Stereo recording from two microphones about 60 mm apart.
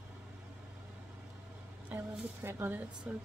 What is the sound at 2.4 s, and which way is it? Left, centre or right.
Speech, right.